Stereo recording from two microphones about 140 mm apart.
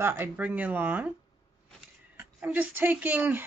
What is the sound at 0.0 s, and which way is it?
Speech, 15° right (ahead or behind).